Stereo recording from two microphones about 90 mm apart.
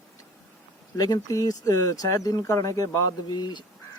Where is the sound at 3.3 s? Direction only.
55° left (ahead or behind).